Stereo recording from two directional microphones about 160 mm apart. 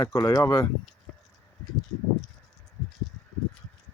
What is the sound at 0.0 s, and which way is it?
Speech, 20° left (ahead or behind).